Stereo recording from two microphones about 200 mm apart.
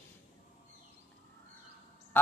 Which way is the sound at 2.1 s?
10° left (ahead or behind).